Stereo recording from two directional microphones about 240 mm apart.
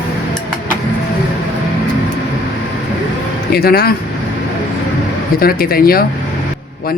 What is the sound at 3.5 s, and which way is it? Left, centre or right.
Speech, left.